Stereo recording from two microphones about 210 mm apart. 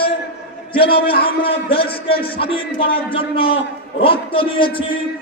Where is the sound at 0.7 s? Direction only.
25° left (ahead or behind).